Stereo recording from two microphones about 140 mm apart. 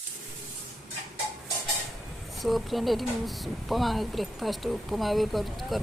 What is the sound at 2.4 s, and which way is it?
Speech, centre (ahead or behind).